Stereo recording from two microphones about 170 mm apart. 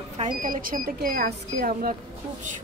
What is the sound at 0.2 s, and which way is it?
Speech, 50° right (ahead or behind).